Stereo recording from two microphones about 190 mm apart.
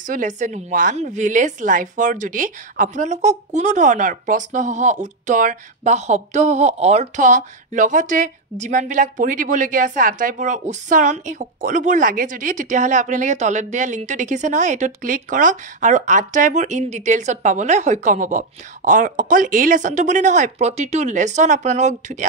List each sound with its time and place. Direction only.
0.0 s a woman's voice: 45° right (ahead or behind)